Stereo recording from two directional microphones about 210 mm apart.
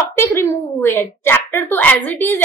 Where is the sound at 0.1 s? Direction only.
10° left (ahead or behind).